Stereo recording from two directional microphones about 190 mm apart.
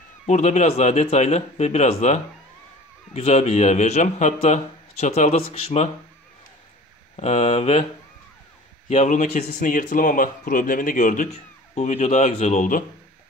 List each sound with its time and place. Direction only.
0.3 s a man's voice: 40° left (ahead or behind)
7.2 s a man's voice: 35° left (ahead or behind)
8.8 s a man's voice: 35° left (ahead or behind)